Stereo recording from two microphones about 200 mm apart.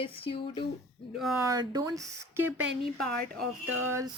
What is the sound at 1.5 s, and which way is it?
Speech, 20° right (ahead or behind).